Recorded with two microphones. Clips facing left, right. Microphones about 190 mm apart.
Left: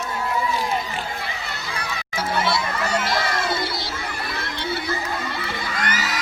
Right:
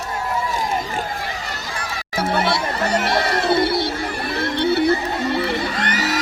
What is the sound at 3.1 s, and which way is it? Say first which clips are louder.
Music: right 4 dB; 30° right (ahead or behind).